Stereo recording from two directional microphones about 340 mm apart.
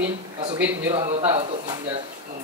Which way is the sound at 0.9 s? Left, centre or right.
Centre.